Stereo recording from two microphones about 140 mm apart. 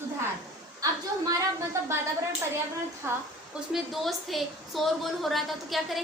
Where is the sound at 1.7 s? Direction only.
20° right (ahead or behind).